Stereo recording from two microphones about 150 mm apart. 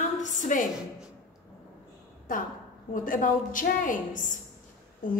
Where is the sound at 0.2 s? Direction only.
55° left (ahead or behind).